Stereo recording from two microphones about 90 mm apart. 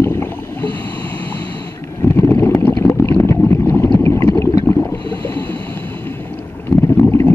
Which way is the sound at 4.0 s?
30° left (ahead or behind).